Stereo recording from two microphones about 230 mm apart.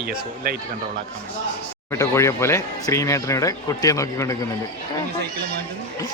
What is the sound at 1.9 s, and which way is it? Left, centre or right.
Speech, centre.